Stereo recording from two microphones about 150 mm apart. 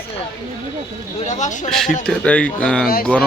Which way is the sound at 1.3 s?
55° left (ahead or behind).